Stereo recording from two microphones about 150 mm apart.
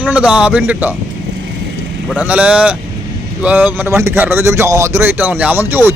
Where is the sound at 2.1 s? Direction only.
10° right (ahead or behind).